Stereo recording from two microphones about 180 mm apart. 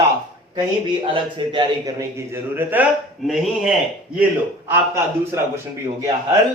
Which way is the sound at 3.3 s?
Centre (ahead or behind).